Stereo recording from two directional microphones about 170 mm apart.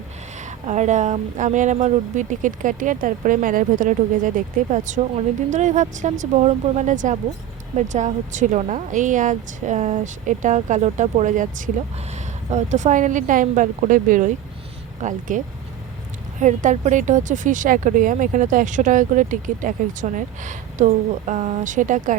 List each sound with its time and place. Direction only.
0.7 s speech: 45° right (ahead or behind)
16.4 s speech: 45° right (ahead or behind)